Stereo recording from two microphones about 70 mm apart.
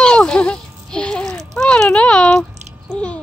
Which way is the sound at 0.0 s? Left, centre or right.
Centre.